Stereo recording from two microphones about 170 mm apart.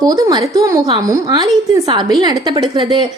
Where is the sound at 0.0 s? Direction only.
20° right (ahead or behind).